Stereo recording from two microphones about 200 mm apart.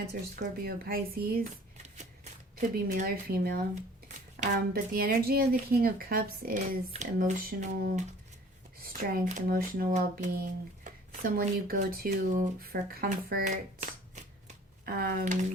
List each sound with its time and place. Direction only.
0.1 s speech: 50° right (ahead or behind)
2.6 s speech: 45° right (ahead or behind)
6.9 s speech: 35° right (ahead or behind)
14.8 s speech: 45° right (ahead or behind)